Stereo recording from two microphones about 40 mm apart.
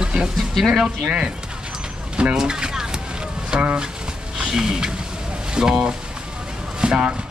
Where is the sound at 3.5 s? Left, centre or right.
Right.